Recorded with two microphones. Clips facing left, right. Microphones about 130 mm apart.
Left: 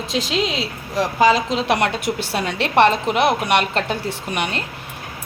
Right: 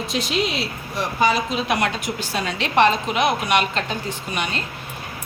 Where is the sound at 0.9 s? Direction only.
90° left; by 3.8 s 60° left (ahead or behind).